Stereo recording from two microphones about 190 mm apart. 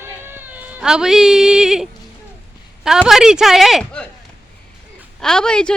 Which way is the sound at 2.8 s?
5° right (ahead or behind).